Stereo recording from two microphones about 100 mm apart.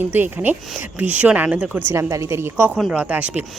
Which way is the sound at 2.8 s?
10° right (ahead or behind).